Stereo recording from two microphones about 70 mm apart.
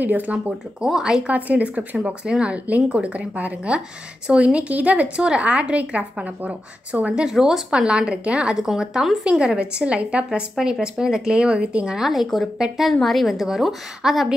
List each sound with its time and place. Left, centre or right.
0.0 s speech: right
0.7 s a woman's voice: centre
1.3 s a woman's voice: right
7.2 s a woman's voice: centre